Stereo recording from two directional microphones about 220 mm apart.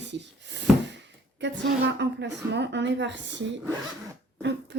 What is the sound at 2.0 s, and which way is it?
A woman's voice, 50° right (ahead or behind).